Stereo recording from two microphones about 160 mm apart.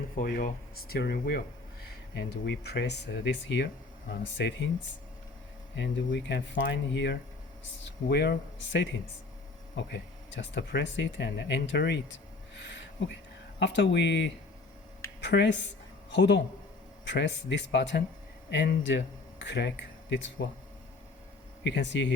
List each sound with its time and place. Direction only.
0.2 s speech: 65° left (ahead or behind); by 4.7 s 90° left
5.7 s speech: 90° left
12.5 s a sound: 90° left
13.6 s speech: 90° left
21.6 s speech: 90° left